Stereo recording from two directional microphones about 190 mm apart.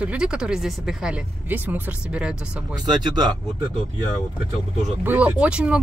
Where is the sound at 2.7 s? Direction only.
20° right (ahead or behind).